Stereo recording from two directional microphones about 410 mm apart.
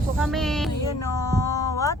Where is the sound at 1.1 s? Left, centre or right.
Centre.